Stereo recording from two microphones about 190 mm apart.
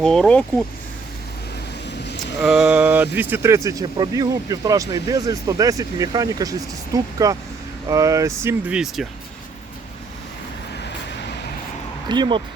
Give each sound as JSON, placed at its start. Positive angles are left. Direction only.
{"t": 0.0, "sound": "speech", "side_deg": 5}
{"t": 2.4, "sound": "speech", "side_deg": -5}
{"t": 12.0, "sound": "speech", "side_deg": -25}